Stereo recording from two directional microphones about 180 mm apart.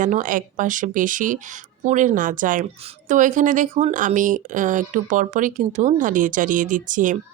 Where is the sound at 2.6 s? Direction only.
35° right (ahead or behind).